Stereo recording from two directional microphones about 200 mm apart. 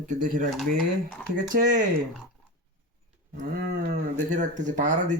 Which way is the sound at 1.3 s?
40° right (ahead or behind).